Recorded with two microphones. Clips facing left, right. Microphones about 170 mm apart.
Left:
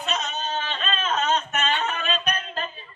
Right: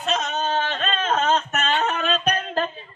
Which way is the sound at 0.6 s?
60° right (ahead or behind).